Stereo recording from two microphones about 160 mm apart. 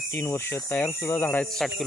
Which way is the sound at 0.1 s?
15° left (ahead or behind).